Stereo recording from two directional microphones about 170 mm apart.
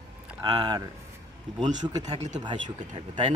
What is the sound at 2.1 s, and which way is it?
Speech, 40° right (ahead or behind).